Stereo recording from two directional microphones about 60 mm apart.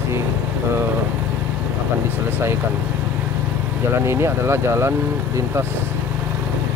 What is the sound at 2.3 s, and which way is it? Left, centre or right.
Speech, right.